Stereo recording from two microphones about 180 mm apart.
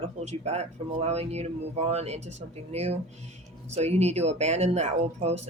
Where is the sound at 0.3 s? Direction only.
35° right (ahead or behind).